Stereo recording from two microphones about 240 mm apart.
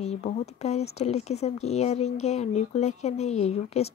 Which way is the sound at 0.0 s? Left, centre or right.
Left.